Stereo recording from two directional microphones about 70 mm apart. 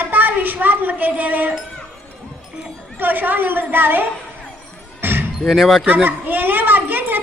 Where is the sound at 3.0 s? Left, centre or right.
Right.